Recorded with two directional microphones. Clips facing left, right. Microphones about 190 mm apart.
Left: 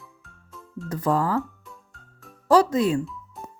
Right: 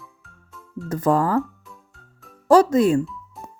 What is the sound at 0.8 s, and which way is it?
Speech, 45° right (ahead or behind).